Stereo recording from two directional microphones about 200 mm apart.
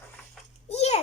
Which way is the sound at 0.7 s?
30° left (ahead or behind).